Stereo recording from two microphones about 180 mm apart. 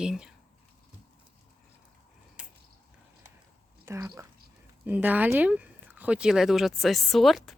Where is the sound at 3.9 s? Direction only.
15° right (ahead or behind).